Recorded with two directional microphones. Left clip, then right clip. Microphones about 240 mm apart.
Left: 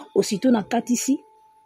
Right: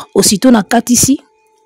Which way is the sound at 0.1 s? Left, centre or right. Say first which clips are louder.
Right 11 dB; right.